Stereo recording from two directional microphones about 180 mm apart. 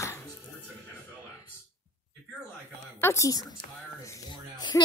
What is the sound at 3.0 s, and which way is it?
Speech, 15° left (ahead or behind).